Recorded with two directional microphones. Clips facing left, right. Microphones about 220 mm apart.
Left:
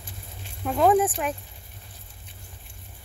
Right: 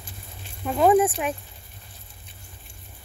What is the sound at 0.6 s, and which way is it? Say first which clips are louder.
Speech: right 2 dB; 5° right (ahead or behind).